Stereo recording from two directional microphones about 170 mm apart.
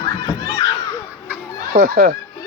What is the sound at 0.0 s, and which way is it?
Children playing, 20° left (ahead or behind).